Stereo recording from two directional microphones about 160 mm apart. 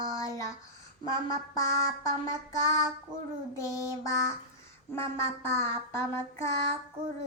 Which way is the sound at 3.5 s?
20° left (ahead or behind).